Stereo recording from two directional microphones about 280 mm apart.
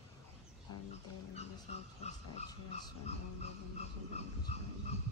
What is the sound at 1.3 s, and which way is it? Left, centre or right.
Speech, left.